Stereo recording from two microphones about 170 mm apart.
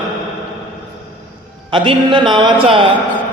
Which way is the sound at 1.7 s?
30° right (ahead or behind).